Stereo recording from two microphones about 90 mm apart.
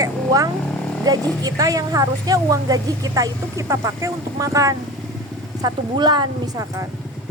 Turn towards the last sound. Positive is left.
turn(degrees=-55)  # may be behind; listen again after turning